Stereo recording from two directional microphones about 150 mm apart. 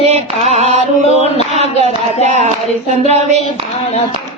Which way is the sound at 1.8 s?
45° right (ahead or behind).